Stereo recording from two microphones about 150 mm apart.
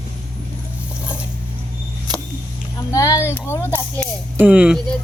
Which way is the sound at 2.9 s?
20° left (ahead or behind).